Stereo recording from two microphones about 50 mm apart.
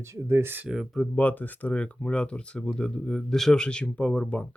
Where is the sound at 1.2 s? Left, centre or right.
Left.